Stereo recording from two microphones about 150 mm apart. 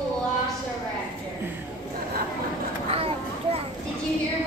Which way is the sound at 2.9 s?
40° right (ahead or behind).